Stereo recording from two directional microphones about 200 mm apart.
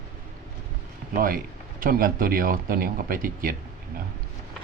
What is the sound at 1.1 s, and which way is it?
Speech, 45° right (ahead or behind).